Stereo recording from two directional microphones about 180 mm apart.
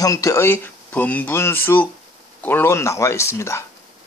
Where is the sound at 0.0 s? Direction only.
20° left (ahead or behind).